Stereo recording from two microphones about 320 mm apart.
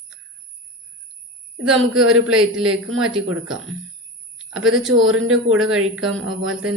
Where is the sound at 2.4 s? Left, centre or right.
Centre.